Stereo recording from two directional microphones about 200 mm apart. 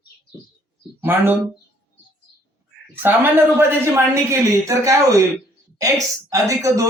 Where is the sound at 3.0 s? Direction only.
10° right (ahead or behind).